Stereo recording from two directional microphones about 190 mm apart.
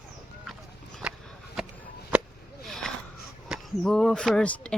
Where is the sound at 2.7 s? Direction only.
Centre (ahead or behind).